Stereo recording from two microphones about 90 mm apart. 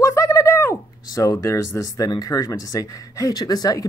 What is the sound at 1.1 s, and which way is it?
Speech, 35° left (ahead or behind).